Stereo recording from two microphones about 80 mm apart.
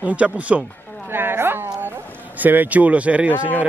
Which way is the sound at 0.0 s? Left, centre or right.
Centre.